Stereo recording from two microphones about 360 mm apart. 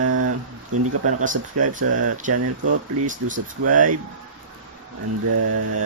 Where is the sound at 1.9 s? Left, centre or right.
Right.